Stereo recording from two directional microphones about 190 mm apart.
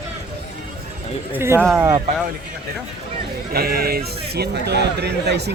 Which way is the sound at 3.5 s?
55° right (ahead or behind).